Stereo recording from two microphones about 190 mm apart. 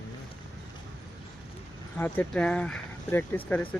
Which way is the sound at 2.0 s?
10° left (ahead or behind).